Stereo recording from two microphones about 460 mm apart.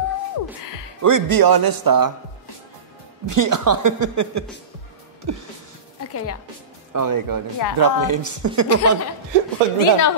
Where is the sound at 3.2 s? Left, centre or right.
Right.